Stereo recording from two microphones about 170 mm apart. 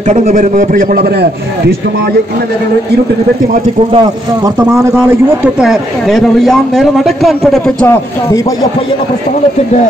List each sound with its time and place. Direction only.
0.0 s a man's voice: 45° right (ahead or behind); by 1.8 s 70° right (ahead or behind)
3.9 s a man's voice: 25° right (ahead or behind)
5.4 s speech: 5° right (ahead or behind); by 8.5 s 15° left (ahead or behind)